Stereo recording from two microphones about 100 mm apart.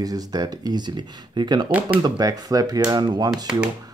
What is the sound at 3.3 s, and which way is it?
Speech, 10° right (ahead or behind).